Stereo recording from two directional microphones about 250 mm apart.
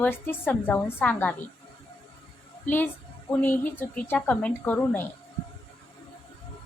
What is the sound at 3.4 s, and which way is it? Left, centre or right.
A woman's voice, centre.